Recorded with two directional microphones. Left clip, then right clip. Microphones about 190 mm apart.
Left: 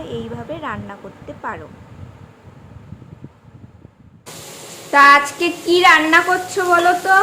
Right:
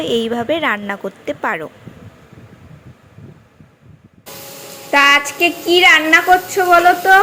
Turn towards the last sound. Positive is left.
turn(degrees=-15)  # may be behind; listen again after turning